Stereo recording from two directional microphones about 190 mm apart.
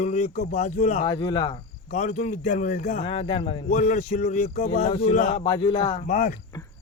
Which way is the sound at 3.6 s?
45° left (ahead or behind).